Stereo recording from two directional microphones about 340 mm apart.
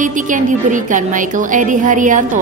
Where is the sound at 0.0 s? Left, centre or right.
Right.